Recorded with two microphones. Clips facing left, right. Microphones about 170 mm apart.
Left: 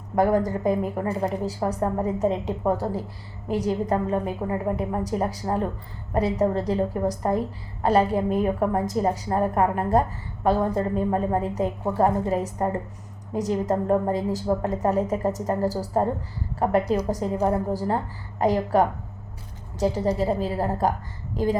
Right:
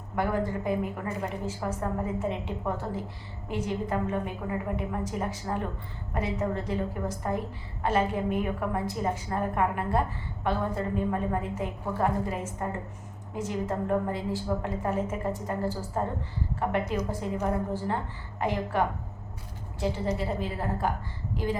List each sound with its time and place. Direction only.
0.2 s a woman's voice: 40° left (ahead or behind)